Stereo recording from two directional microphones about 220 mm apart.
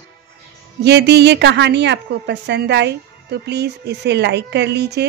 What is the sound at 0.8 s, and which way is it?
A woman's voice, 50° right (ahead or behind).